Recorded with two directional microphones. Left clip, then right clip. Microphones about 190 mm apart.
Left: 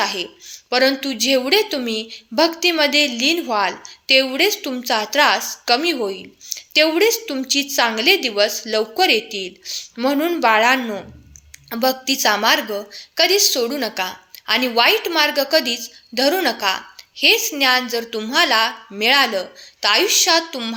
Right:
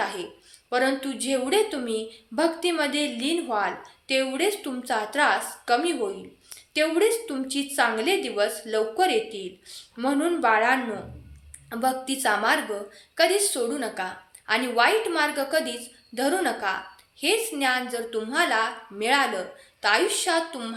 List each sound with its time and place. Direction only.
0.0 s a woman's voice: 40° left (ahead or behind)